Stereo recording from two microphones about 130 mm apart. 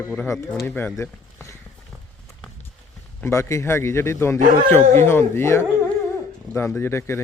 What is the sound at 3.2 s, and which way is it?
Speech, 20° left (ahead or behind).